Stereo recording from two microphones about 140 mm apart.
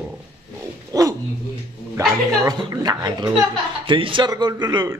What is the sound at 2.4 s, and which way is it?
A man's voice, 25° right (ahead or behind).